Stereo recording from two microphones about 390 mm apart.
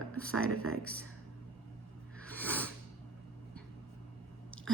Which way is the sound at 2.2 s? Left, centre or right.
Centre.